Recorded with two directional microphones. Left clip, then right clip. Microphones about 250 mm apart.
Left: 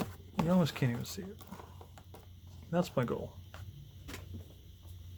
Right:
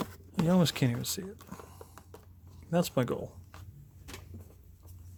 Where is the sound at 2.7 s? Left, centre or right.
Right.